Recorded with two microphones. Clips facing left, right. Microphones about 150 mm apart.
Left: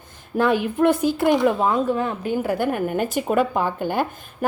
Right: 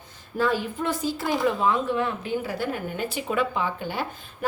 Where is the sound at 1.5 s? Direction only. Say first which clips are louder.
Left 4 dB; 40° left (ahead or behind).